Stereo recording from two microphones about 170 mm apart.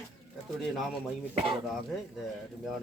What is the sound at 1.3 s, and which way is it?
Speech, 30° right (ahead or behind).